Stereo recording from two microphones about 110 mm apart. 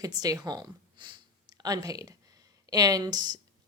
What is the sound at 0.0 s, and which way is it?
Speech, 35° right (ahead or behind).